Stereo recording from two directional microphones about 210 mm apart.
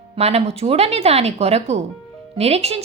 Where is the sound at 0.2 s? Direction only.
30° right (ahead or behind).